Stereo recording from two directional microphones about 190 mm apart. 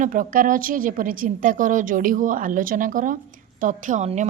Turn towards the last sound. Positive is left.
turn(degrees=-40)  # may be behind; listen again after turning